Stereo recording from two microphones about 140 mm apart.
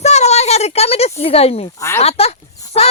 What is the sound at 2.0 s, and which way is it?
Speech, 45° left (ahead or behind).